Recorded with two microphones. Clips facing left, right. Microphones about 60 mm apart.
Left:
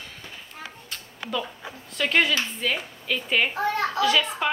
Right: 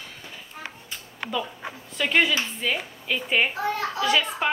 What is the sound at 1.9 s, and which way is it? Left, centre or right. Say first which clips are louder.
A woman's voice: even; centre.